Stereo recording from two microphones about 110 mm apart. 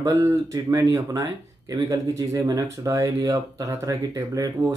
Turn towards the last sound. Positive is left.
turn(degrees=-30)  # may be behind; listen again after turning